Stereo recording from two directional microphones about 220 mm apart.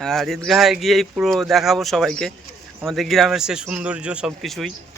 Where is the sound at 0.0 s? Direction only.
Centre (ahead or behind).